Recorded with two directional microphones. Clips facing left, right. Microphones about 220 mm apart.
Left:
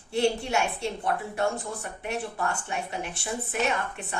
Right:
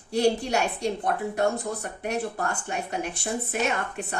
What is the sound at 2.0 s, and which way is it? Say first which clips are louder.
Speech: right 2 dB; 40° right (ahead or behind).